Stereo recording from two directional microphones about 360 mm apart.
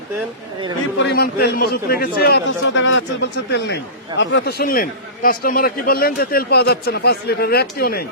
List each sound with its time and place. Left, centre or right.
0.9 s a man's voice: left